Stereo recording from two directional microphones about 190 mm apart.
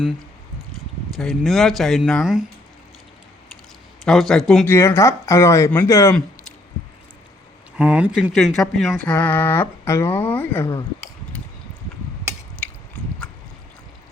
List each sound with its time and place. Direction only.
1.1 s speech: centre (ahead or behind)
4.0 s speech: centre (ahead or behind)
7.8 s speech: 5° right (ahead or behind); by 10.8 s 15° left (ahead or behind)